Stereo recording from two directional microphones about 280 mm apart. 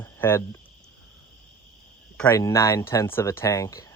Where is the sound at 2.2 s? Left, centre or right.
Centre.